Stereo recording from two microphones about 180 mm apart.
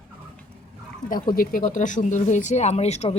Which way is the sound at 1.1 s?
50° left (ahead or behind).